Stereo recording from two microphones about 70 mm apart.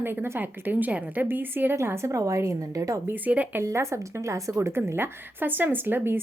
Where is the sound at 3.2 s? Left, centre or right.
Right.